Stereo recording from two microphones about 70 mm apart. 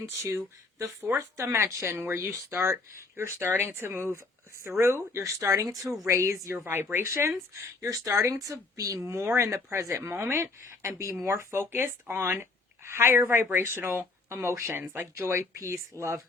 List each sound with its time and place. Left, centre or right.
0.0 s speech: right
9.2 s speech: right